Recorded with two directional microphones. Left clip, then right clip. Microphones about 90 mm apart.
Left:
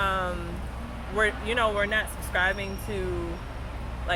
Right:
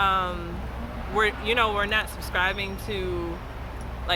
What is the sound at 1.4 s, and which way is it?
Speech, 75° right (ahead or behind).